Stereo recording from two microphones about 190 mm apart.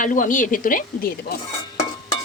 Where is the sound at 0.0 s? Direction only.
45° left (ahead or behind).